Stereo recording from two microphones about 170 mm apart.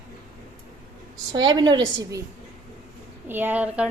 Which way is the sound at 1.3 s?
25° right (ahead or behind).